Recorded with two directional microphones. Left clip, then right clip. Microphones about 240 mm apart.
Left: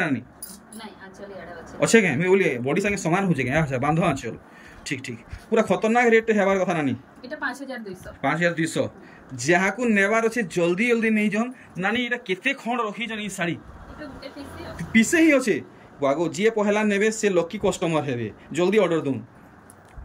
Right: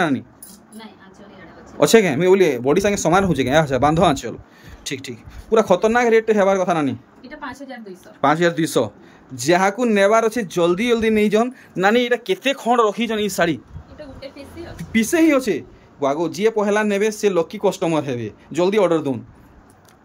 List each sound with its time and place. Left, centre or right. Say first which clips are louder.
1.8 s speech: right 5 dB; centre
8.2 s speech: right 6 dB; centre
14.8 s speech: right 2 dB; centre